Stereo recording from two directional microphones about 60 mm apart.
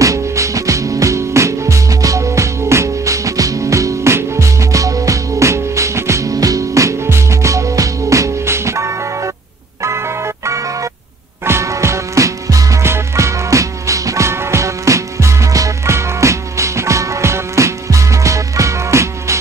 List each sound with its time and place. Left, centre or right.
0.0 s music: right
12.8 s music: right
15.9 s music: right